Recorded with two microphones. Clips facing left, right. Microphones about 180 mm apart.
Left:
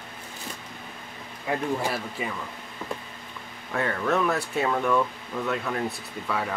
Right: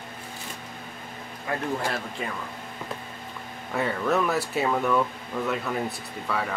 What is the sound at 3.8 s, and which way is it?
Speech, 5° right (ahead or behind).